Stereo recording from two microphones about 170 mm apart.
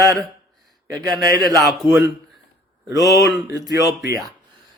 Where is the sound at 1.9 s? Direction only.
15° right (ahead or behind).